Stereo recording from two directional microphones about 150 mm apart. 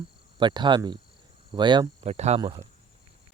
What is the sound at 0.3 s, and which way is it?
Speech, 30° right (ahead or behind).